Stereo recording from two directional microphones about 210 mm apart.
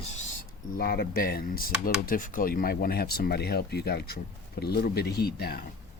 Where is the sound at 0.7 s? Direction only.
50° left (ahead or behind).